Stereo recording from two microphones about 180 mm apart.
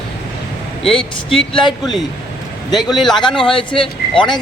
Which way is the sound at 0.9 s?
30° left (ahead or behind).